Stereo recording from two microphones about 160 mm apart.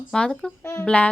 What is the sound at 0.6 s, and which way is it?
Child singing, 15° left (ahead or behind).